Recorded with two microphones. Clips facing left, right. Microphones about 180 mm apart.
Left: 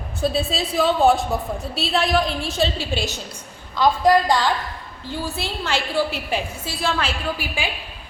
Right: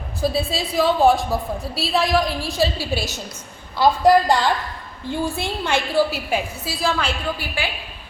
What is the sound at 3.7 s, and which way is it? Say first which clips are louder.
A woman's voice: right 2 dB; 10° right (ahead or behind).